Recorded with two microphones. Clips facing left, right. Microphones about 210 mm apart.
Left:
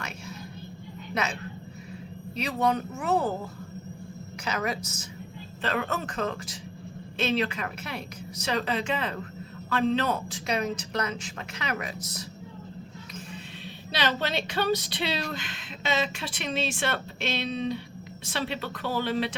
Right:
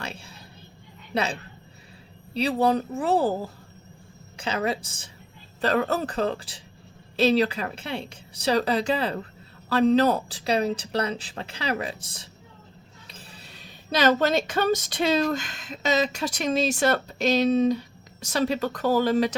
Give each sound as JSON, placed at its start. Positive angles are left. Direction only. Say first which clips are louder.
{"t": 0.0, "sound": "a sound", "louder": "right 1 dB", "side_deg": -30}
{"t": 1.1, "sound": "a woman's voice", "louder": "right 4 dB", "side_deg": -35}
{"t": 13.9, "sound": "speech", "louder": "right 8 dB", "side_deg": -45}